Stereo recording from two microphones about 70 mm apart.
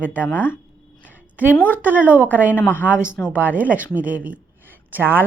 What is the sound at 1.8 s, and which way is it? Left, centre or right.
Speech, right.